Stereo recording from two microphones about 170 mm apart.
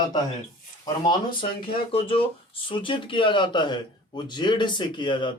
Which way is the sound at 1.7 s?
35° left (ahead or behind).